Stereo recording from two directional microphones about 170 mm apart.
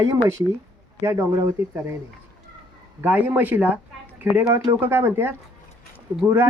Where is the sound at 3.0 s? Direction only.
10° right (ahead or behind).